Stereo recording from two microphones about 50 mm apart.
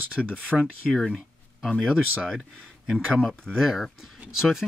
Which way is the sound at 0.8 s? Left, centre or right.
Centre.